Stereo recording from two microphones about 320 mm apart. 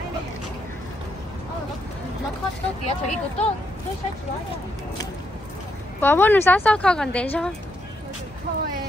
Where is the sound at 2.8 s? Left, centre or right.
Left.